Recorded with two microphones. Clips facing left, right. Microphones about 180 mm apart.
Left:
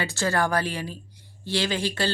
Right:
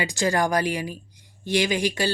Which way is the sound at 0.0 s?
15° right (ahead or behind).